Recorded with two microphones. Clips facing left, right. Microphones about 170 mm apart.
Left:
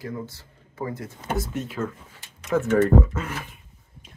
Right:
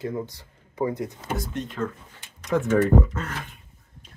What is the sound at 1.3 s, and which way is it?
Speech, 5° left (ahead or behind).